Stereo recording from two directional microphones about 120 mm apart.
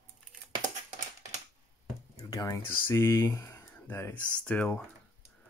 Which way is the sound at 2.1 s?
30° left (ahead or behind).